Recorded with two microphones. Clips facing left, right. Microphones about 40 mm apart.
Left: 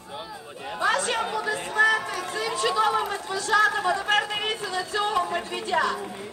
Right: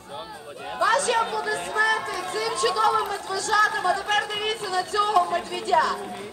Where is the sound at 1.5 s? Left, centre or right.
Centre.